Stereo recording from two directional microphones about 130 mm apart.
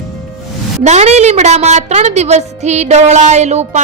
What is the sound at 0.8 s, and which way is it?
A woman's voice, 60° right (ahead or behind).